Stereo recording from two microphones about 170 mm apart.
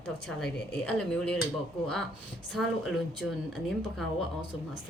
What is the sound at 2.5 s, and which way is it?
A woman's voice, centre (ahead or behind).